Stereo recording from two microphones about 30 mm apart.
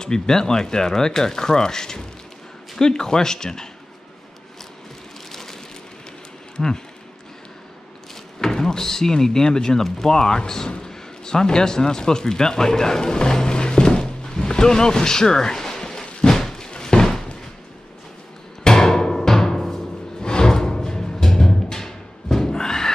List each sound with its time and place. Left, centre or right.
0.0 s speech: left
5.3 s vehicle: centre
6.6 s speech: centre
8.1 s speech: centre
10.8 s a sound: left
18.8 s music: centre